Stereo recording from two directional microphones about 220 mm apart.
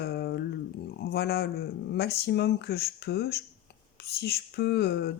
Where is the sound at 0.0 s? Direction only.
45° left (ahead or behind).